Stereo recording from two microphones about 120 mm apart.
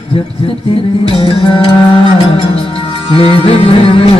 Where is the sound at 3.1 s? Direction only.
50° left (ahead or behind).